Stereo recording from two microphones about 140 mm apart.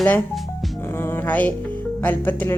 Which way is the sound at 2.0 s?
10° left (ahead or behind).